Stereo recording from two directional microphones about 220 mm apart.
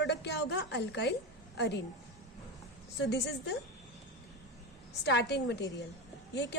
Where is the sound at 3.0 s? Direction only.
50° left (ahead or behind).